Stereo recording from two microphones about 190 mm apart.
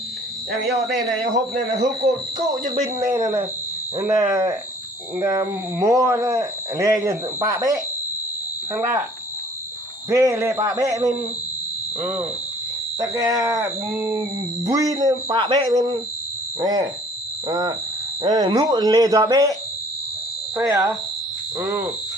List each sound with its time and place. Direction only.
2.5 s speech: 20° right (ahead or behind)
10.1 s speech: 15° right (ahead or behind)
13.0 s speech: 20° right (ahead or behind)
20.6 s speech: 20° right (ahead or behind)